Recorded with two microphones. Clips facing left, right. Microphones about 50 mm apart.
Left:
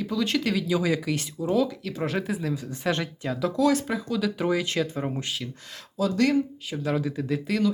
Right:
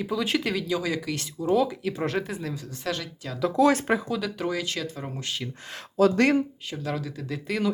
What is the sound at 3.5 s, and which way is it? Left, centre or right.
Speech, right.